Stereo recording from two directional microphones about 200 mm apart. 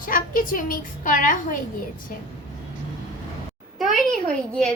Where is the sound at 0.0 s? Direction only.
45° left (ahead or behind).